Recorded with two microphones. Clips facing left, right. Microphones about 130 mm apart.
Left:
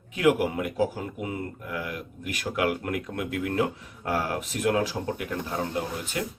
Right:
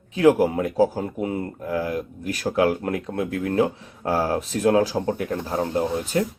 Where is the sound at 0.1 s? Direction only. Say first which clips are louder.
Right 6 dB; 30° right (ahead or behind).